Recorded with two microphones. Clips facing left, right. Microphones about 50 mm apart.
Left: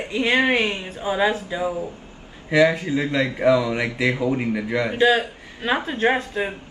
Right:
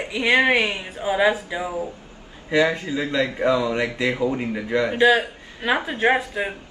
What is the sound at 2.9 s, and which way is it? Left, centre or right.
A man's voice, left.